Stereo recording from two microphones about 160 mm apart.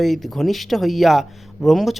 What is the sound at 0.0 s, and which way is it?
Speech, centre (ahead or behind).